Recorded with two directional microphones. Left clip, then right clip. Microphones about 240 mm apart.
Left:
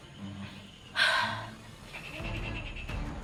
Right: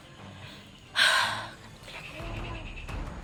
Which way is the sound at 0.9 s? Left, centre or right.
Right.